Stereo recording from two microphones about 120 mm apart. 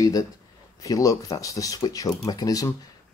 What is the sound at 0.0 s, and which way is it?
Speech, 30° left (ahead or behind).